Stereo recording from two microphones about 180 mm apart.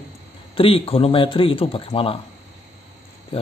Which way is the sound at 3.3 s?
30° left (ahead or behind).